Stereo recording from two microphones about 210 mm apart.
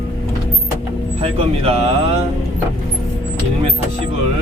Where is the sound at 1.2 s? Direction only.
30° right (ahead or behind).